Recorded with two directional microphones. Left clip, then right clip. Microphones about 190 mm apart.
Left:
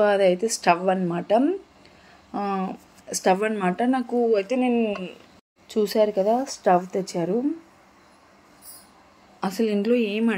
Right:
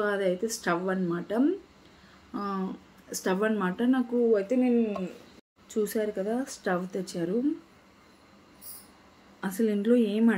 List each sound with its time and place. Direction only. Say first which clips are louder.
0.0 s speech: left 9 dB; 35° left (ahead or behind)
5.7 s a woman's voice: left 8 dB; 30° left (ahead or behind)
9.4 s speech: left 5 dB; 30° left (ahead or behind)